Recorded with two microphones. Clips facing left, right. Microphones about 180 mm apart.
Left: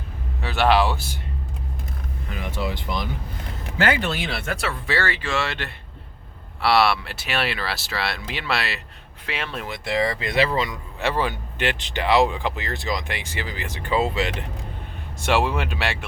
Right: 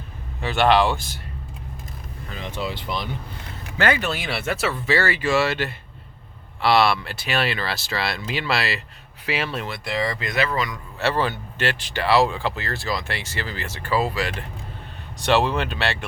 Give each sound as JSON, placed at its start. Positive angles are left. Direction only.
{"t": 0.4, "sound": "speech", "side_deg": 5}
{"t": 2.6, "sound": "speech", "side_deg": 15}
{"t": 4.2, "sound": "speech", "side_deg": -5}
{"t": 10.0, "sound": "speech", "side_deg": 30}
{"t": 11.0, "sound": "speech", "side_deg": 10}
{"t": 15.2, "sound": "speech", "side_deg": 10}